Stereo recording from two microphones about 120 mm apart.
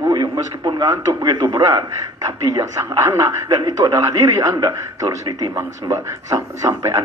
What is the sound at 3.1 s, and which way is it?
Speech, 30° right (ahead or behind).